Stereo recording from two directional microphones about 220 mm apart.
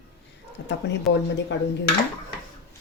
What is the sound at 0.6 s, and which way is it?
Speech, 55° left (ahead or behind).